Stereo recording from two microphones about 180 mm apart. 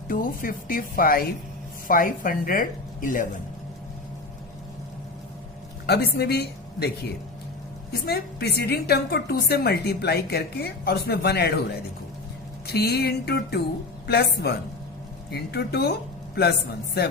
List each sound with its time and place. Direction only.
0.1 s speech: 50° left (ahead or behind)
5.8 s a woman's voice: 65° left (ahead or behind)
8.0 s a woman's voice: 65° left (ahead or behind)
12.6 s a woman's voice: 60° left (ahead or behind)